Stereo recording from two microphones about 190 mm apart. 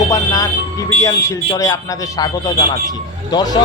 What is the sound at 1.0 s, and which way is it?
A man's voice, 15° left (ahead or behind).